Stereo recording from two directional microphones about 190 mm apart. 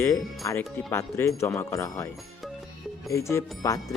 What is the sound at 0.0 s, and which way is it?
Speech, 15° left (ahead or behind).